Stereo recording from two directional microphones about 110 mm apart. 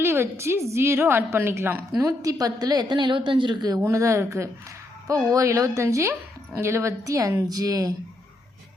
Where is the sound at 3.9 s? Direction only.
25° right (ahead or behind).